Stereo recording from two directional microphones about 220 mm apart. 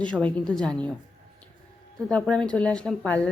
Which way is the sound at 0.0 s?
5° left (ahead or behind).